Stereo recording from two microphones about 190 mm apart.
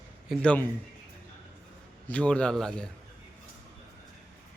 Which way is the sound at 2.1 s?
5° left (ahead or behind).